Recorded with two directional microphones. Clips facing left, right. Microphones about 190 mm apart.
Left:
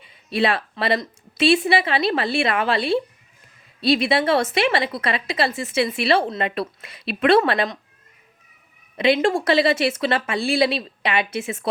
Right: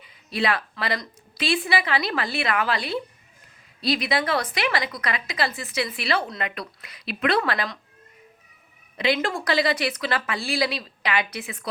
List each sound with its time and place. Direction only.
0.0 s a woman's voice: 25° left (ahead or behind)
9.0 s a woman's voice: 25° left (ahead or behind)